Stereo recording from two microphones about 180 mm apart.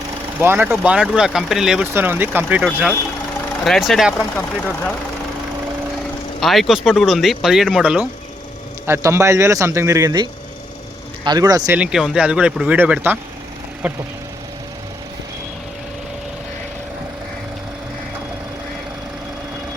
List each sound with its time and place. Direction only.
0.3 s speech: 10° right (ahead or behind); by 4.9 s 10° left (ahead or behind)
6.4 s speech: centre (ahead or behind)
8.9 s speech: 15° right (ahead or behind)
11.7 s speech: 5° right (ahead or behind)